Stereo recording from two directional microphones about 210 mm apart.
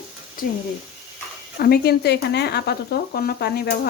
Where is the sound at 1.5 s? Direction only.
45° left (ahead or behind).